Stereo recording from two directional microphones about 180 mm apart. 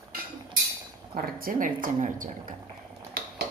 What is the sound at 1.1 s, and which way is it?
Speech, 50° right (ahead or behind).